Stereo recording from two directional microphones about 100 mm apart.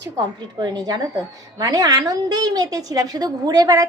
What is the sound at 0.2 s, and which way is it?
A woman's voice, 45° right (ahead or behind).